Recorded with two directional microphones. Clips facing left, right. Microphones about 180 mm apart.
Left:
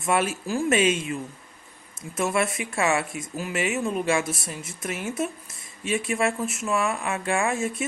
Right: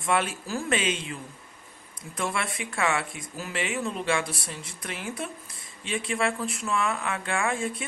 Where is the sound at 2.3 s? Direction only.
25° left (ahead or behind).